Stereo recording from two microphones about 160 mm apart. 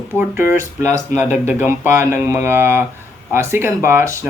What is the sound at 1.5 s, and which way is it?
Speech, 10° right (ahead or behind).